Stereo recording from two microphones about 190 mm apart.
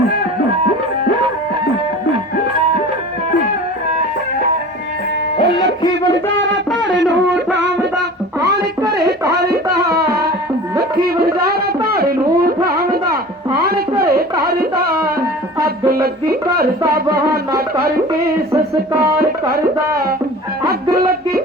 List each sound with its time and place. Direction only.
5.4 s music: 25° left (ahead or behind)
6.2 s a sound: centre (ahead or behind)
6.8 s a sound: 70° right (ahead or behind)
9.3 s music: 55° right (ahead or behind)
11.0 s a sound: 55° right (ahead or behind)
12.7 s music: 55° right (ahead or behind)
16.3 s speech: 55° right (ahead or behind)
16.9 s music: 55° right (ahead or behind)
19.2 s tabla: 55° right (ahead or behind)
20.9 s music: 55° right (ahead or behind)